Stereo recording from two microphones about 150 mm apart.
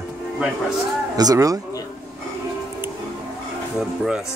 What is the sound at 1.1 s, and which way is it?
Speech, 25° right (ahead or behind).